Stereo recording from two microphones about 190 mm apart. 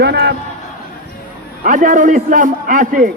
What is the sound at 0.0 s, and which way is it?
Speech, 60° right (ahead or behind).